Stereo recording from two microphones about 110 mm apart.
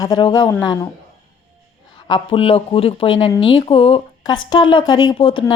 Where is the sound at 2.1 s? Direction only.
55° left (ahead or behind).